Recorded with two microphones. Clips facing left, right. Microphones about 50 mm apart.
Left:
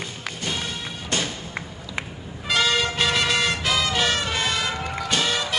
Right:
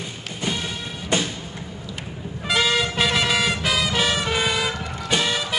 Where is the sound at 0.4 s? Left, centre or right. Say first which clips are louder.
Right 3 dB; centre.